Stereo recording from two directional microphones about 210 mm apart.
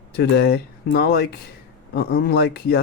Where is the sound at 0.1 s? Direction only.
50° left (ahead or behind).